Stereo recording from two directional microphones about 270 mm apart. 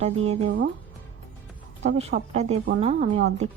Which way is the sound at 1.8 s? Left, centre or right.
Right.